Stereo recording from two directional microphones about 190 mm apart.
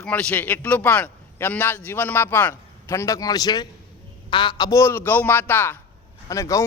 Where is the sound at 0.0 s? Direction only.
5° left (ahead or behind).